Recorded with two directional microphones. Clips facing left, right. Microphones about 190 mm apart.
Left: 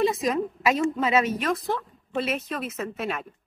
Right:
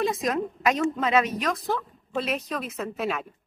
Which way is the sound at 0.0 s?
Centre (ahead or behind).